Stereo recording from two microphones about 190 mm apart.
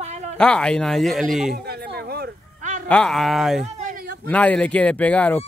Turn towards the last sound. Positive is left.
turn(degrees=5)  # may be behind; listen again after turning